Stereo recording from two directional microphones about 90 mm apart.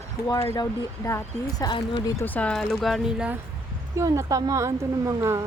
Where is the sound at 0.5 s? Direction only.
40° left (ahead or behind).